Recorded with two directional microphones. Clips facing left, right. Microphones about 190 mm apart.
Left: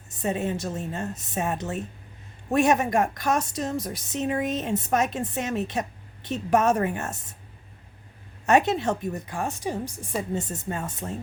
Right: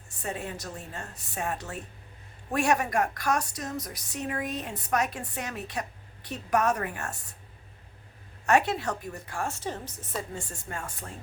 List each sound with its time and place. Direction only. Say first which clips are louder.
0.2 s a woman's voice: left 8 dB; 20° left (ahead or behind)
8.4 s a woman's voice: left 4 dB; 20° left (ahead or behind)